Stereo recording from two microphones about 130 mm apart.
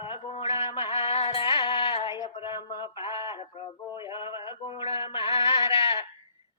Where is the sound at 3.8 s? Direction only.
40° left (ahead or behind).